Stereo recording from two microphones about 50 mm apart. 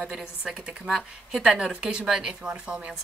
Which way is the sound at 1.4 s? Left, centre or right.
Centre.